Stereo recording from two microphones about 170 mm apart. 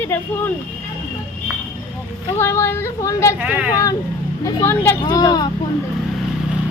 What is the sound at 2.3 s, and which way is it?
Speech, 15° left (ahead or behind).